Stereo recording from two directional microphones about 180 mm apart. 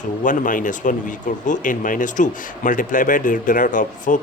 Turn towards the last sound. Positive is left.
turn(degrees=45)  # may be behind; listen again after turning